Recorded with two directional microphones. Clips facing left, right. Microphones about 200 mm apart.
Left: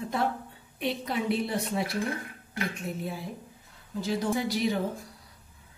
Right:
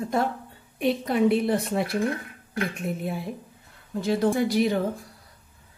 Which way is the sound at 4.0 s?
55° right (ahead or behind).